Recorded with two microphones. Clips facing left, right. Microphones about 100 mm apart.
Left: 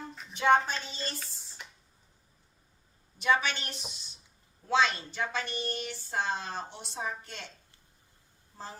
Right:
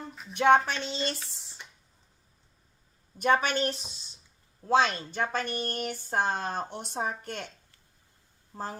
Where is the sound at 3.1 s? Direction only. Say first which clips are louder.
Right 3 dB; 50° right (ahead or behind).